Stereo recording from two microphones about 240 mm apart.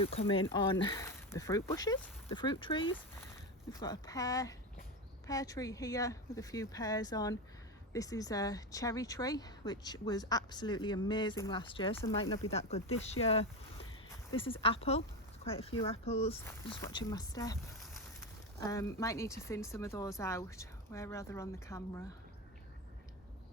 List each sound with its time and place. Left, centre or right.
0.0 s speech: left
16.8 s speech: centre
18.6 s speech: centre